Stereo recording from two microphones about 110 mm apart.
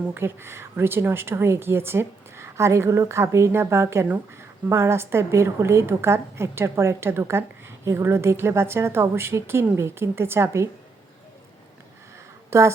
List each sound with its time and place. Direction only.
0.0 s a woman's voice: 20° right (ahead or behind)
12.5 s speech: 25° right (ahead or behind)